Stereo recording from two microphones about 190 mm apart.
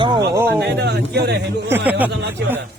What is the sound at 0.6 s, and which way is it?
Speech, 60° right (ahead or behind).